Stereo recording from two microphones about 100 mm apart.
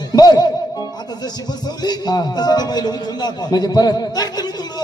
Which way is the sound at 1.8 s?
45° left (ahead or behind).